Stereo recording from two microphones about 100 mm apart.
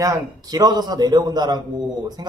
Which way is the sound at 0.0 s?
35° right (ahead or behind).